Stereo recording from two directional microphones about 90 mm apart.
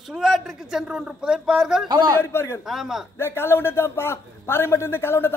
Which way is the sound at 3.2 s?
25° left (ahead or behind).